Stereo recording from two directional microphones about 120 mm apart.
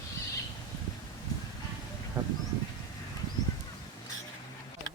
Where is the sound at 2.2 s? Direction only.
15° right (ahead or behind).